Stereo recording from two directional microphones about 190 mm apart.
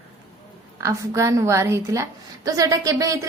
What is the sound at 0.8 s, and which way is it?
A woman's voice, 15° right (ahead or behind).